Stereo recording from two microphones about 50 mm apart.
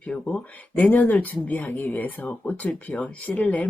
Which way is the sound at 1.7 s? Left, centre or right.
Left.